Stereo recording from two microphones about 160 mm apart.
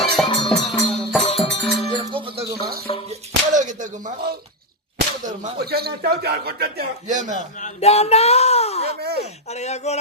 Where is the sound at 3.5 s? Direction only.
50° right (ahead or behind).